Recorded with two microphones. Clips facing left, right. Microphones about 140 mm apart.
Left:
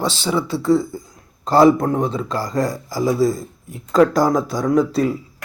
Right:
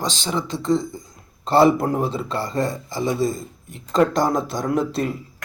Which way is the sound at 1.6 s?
5° right (ahead or behind).